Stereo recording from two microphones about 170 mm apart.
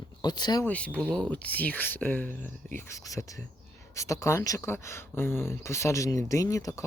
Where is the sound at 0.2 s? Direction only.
25° left (ahead or behind).